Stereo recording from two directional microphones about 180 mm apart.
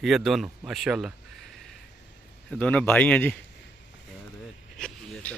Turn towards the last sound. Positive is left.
turn(degrees=5)  # may be behind; listen again after turning